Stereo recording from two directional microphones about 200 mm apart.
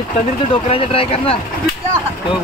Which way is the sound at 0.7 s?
30° left (ahead or behind).